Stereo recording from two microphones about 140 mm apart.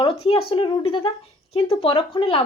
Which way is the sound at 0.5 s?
35° left (ahead or behind).